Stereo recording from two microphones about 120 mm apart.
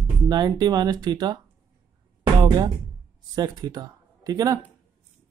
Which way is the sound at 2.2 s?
35° right (ahead or behind).